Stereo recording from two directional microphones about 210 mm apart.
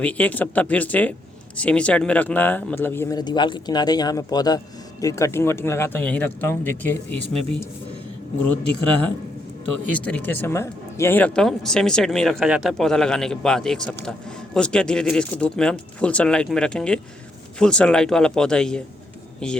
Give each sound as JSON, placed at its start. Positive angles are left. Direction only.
{"t": 0.0, "sound": "speech", "side_deg": 5}
{"t": 10.0, "sound": "speech", "side_deg": 5}